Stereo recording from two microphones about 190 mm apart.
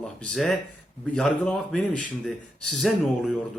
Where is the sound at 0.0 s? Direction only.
5° left (ahead or behind).